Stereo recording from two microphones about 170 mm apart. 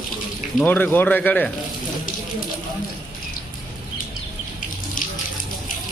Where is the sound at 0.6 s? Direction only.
10° left (ahead or behind).